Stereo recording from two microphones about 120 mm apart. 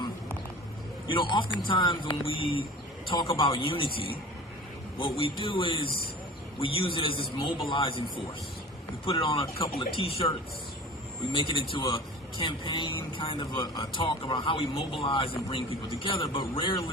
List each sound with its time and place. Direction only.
1.0 s speech: 45° left (ahead or behind)
9.0 s speech: 50° left (ahead or behind)